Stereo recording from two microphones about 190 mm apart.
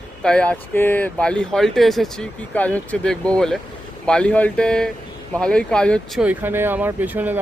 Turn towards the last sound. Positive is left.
turn(degrees=-10)  # may be behind; listen again after turning